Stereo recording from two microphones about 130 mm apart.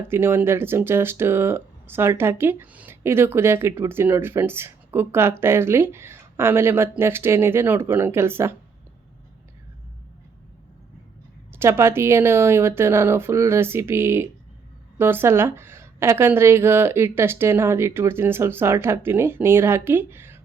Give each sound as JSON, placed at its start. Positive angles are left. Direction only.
{"t": 0.1, "sound": "speech", "side_deg": -15}
{"t": 11.5, "sound": "a woman's voice", "side_deg": -20}